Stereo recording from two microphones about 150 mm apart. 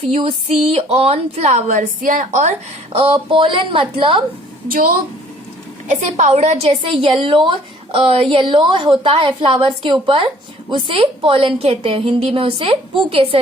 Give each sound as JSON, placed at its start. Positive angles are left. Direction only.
{"t": 0.1, "sound": "speech", "side_deg": -40}
{"t": 4.7, "sound": "speech", "side_deg": -70}
{"t": 5.9, "sound": "speech", "side_deg": -50}